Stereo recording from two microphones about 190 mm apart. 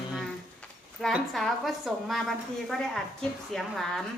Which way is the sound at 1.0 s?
Centre (ahead or behind).